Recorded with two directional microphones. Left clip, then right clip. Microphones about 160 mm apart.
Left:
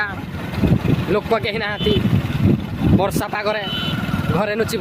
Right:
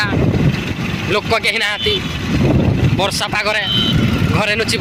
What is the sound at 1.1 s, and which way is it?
Speech, 15° left (ahead or behind).